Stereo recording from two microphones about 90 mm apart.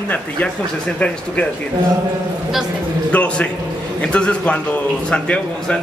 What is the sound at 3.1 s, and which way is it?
A man's voice, 15° left (ahead or behind).